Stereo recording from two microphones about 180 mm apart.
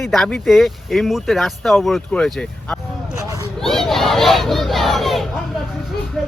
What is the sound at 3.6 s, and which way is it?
Battle cry, centre (ahead or behind).